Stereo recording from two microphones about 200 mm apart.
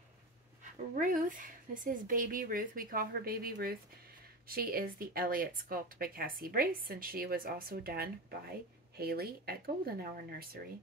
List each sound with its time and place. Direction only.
0.9 s speech: 40° right (ahead or behind)